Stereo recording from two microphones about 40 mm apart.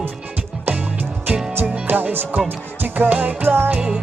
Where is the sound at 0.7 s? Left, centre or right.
Right.